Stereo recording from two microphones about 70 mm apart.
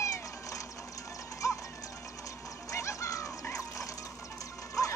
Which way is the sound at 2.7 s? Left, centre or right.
Left.